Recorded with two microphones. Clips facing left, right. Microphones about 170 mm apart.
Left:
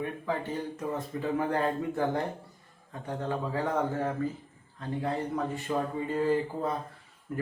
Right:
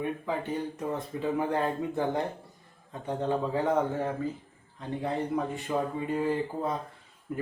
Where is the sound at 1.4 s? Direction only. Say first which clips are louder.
Left 1 dB; 15° right (ahead or behind).